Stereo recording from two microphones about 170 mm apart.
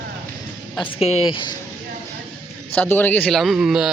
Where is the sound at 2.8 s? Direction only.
10° left (ahead or behind).